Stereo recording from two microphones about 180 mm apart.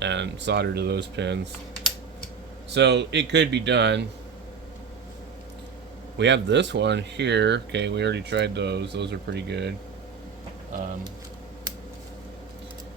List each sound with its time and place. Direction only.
0.0 s speech: 80° right
2.7 s speech: 75° right (ahead or behind)
6.1 s speech: 80° right